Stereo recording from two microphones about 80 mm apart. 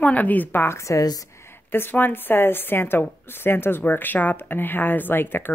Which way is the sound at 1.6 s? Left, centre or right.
Left.